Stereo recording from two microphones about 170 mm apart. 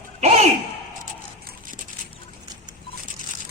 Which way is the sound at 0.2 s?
40° right (ahead or behind).